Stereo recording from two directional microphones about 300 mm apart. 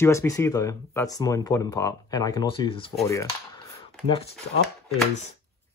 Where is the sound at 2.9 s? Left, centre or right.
Centre.